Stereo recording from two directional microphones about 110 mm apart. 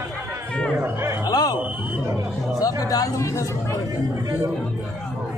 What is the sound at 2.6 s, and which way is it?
Speech, 35° left (ahead or behind).